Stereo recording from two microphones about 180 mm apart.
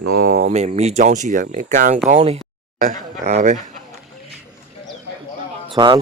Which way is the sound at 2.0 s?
35° right (ahead or behind).